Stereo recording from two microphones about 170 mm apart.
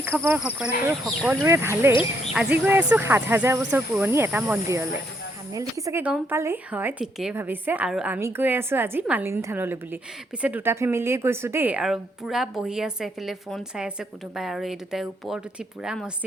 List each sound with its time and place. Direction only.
0.0 s a woman's voice: 15° right (ahead or behind)
1.9 s speech: 30° left (ahead or behind)
2.3 s a woman's voice: 10° right (ahead or behind)